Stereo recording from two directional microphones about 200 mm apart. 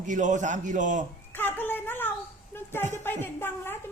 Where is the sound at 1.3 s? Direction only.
10° left (ahead or behind).